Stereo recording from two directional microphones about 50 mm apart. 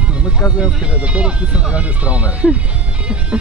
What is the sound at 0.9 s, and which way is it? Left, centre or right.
Speech, right.